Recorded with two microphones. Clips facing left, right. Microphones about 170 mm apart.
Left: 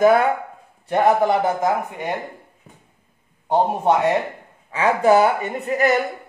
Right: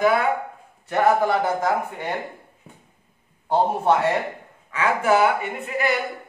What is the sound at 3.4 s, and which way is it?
Speech, 20° left (ahead or behind).